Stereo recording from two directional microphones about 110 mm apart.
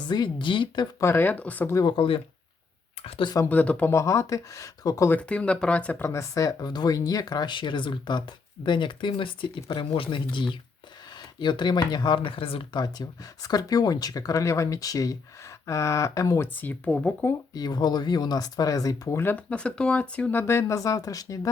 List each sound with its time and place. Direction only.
0.1 s speech: 45° left (ahead or behind)
0.9 s speech: 25° left (ahead or behind)
1.9 s speech: 50° left (ahead or behind)
3.4 s speech: 15° left (ahead or behind)
4.0 s speech: 30° left (ahead or behind)
5.0 s speech: 15° left (ahead or behind)
6.1 s speech: 30° left (ahead or behind); by 12.8 s 55° left (ahead or behind)
12.8 s speech: 35° left (ahead or behind)
16.6 s speech: 15° left (ahead or behind)
17.5 s speech: 40° left (ahead or behind)
19.2 s speech: 15° left (ahead or behind)
20.4 s speech: 25° left (ahead or behind)